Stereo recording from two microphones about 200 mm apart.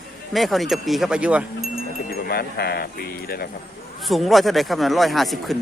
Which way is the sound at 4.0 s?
Centre (ahead or behind).